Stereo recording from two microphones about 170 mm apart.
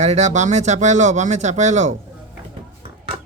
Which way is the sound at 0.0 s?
40° right (ahead or behind).